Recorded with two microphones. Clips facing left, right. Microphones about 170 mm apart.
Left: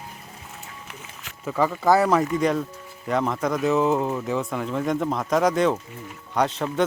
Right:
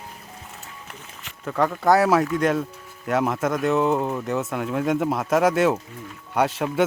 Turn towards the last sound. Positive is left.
turn(degrees=-10)  # may be behind; listen again after turning